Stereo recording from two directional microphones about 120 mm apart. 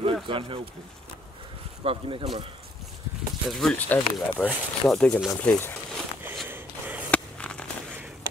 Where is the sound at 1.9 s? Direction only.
45° right (ahead or behind).